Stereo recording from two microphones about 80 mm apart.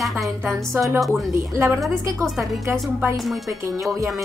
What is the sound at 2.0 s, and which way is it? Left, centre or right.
Speech, right.